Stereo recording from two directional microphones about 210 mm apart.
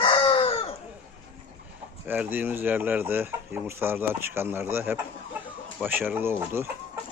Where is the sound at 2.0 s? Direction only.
10° right (ahead or behind).